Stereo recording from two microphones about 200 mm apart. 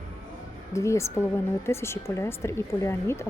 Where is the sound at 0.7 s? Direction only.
15° left (ahead or behind).